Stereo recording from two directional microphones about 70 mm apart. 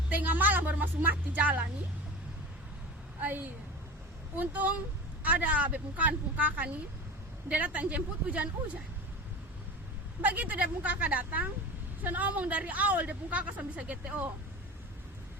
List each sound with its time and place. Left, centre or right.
0.1 s a woman's voice: right
3.2 s a woman's voice: right
10.2 s a woman's voice: right